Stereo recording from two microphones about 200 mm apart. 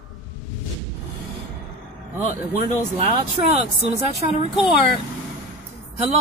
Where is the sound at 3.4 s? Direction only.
25° right (ahead or behind).